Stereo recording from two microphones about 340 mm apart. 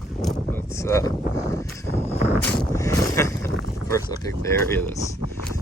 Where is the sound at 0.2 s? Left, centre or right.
Centre.